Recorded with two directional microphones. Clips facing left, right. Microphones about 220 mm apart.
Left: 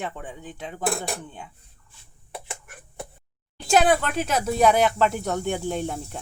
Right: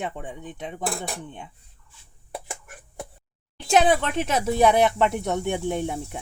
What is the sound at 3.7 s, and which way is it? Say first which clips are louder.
Speech: even; 25° right (ahead or behind).